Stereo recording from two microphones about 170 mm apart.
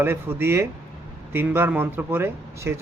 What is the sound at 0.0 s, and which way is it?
Speech, 15° right (ahead or behind).